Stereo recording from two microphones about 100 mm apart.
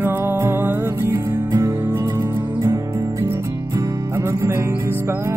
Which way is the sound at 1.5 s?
35° right (ahead or behind).